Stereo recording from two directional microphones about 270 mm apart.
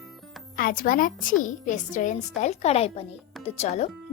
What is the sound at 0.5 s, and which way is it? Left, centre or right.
A woman's voice, left.